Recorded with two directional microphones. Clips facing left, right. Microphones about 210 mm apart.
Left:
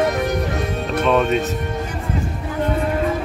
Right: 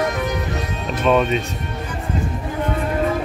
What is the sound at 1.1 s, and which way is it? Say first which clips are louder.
Music: right 1 dB; centre (ahead or behind).